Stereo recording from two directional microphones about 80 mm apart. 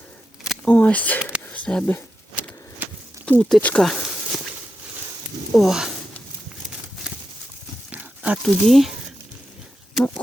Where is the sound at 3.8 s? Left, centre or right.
Centre.